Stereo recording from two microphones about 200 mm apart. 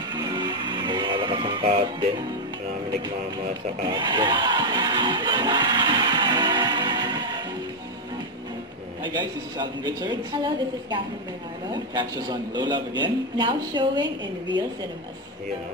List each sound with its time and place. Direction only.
0.2 s music: 20° right (ahead or behind)
3.9 s crowd: 25° right (ahead or behind)
9.0 s a man's voice: 20° right (ahead or behind)